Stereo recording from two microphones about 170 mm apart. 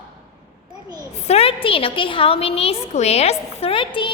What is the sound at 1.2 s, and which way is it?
A woman's voice, 35° left (ahead or behind).